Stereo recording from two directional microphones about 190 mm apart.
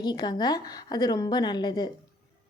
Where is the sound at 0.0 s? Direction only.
20° left (ahead or behind).